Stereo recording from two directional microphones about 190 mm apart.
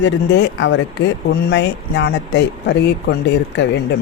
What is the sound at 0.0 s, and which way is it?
Speech, 70° left (ahead or behind).